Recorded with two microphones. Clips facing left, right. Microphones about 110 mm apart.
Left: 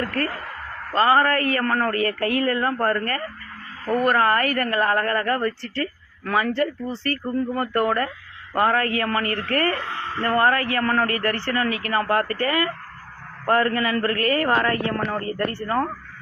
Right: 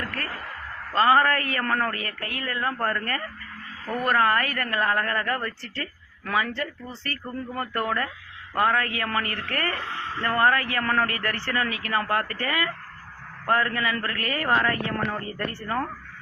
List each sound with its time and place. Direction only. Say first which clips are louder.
0.9 s a woman's voice: left 2 dB; 30° left (ahead or behind)
2.0 s speech: left 12 dB; 65° left (ahead or behind)
2.5 s a woman's voice: left 5 dB; 40° left (ahead or behind)
6.6 s a woman's voice: left 9 dB; 45° left (ahead or behind)
8.5 s a woman's voice: left 3 dB; 40° left (ahead or behind)